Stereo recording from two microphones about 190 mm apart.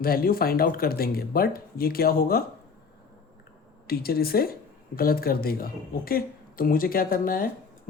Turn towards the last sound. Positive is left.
turn(degrees=50)  # may be behind; listen again after turning